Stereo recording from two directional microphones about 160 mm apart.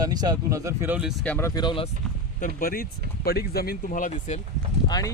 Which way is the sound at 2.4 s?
65° left (ahead or behind).